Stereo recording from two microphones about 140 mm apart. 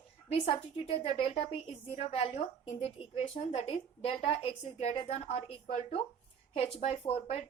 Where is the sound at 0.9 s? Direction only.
45° left (ahead or behind).